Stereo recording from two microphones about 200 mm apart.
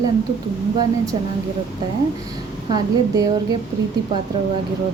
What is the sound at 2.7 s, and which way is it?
Speech, 15° right (ahead or behind).